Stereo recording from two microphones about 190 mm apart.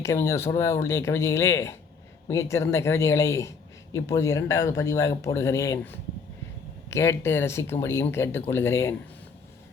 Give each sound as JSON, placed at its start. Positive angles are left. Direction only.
{"t": 0.0, "sound": "speech", "side_deg": 15}